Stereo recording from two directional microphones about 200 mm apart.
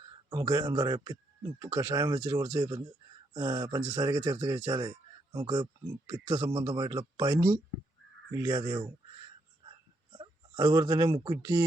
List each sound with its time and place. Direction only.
0.3 s speech: 20° right (ahead or behind)
10.2 s speech: 20° right (ahead or behind)